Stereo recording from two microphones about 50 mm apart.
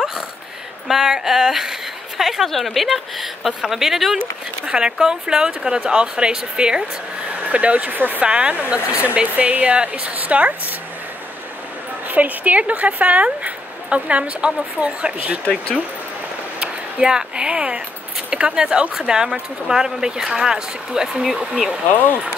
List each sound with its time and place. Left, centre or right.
0.8 s a woman's voice: centre; by 8.2 s right
8.2 s speech: right
12.1 s speech: right
15.4 s speech: left
16.5 s a sound: right
18.3 s speech: centre